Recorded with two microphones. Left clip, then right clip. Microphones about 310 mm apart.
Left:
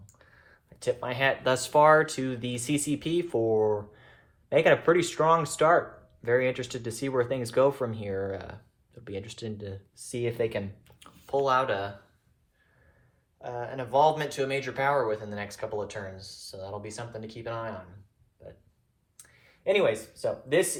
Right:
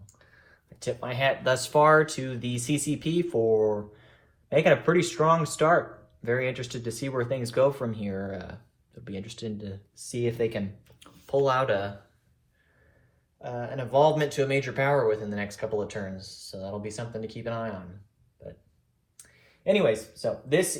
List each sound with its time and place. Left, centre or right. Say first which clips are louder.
0.2 s speech: left 1 dB; left
11.0 s speech: right 2 dB; centre
13.4 s speech: right 1 dB; left
19.1 s speech: right 1 dB; left